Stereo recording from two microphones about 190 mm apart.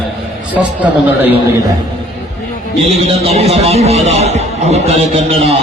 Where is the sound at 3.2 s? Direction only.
35° right (ahead or behind).